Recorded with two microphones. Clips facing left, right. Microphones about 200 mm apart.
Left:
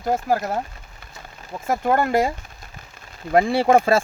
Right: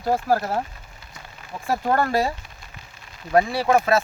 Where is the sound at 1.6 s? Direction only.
20° left (ahead or behind).